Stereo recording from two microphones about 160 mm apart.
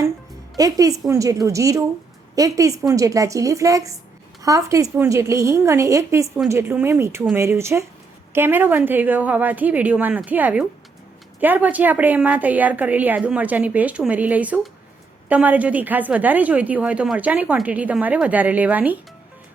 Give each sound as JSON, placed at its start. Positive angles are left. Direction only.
{"t": 0.5, "sound": "a woman's voice", "side_deg": -20}